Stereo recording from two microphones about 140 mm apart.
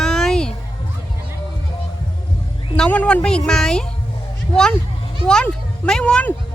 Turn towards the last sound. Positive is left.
turn(degrees=10)  # may be behind; listen again after turning